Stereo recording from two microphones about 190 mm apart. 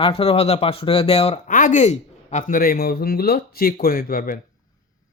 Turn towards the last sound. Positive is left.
turn(degrees=50)  # may be behind; listen again after turning